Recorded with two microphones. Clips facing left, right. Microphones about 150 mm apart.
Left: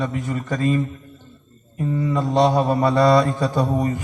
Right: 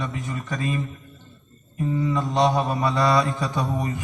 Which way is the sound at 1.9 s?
45° left (ahead or behind).